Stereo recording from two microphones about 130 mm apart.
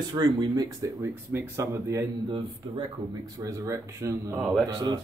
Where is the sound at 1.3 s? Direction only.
20° right (ahead or behind).